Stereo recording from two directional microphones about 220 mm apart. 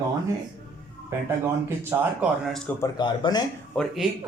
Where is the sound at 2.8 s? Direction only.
20° left (ahead or behind).